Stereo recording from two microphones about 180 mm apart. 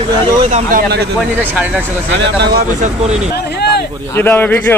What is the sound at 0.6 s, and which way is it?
Speech, 60° right (ahead or behind).